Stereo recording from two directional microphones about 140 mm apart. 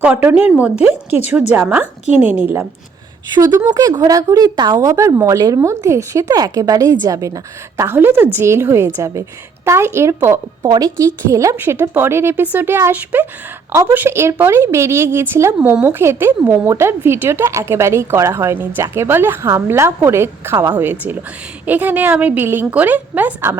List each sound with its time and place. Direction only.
0.0 s a woman's voice: 10° right (ahead or behind)
3.4 s a woman's voice: 25° right (ahead or behind)